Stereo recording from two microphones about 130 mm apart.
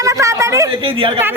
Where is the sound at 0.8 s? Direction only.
40° right (ahead or behind).